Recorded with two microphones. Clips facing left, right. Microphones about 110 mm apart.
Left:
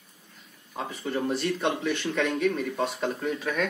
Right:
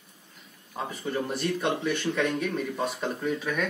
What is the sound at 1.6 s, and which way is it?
A man's voice, 5° right (ahead or behind).